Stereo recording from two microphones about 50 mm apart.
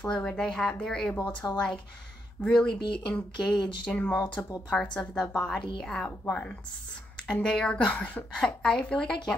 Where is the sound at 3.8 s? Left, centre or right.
Left.